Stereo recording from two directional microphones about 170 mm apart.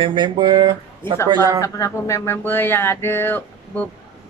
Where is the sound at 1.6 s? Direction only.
20° left (ahead or behind).